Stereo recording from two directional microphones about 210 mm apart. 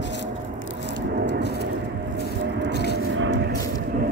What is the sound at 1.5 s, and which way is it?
Vehicle, 50° right (ahead or behind).